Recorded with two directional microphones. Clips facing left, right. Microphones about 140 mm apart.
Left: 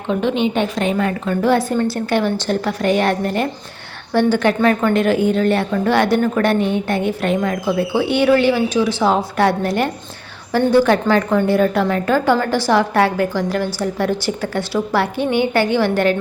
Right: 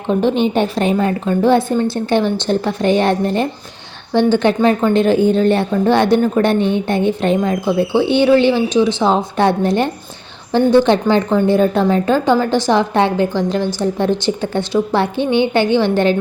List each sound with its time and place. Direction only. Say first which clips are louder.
0.1 s a woman's voice: right 3 dB; 35° right (ahead or behind)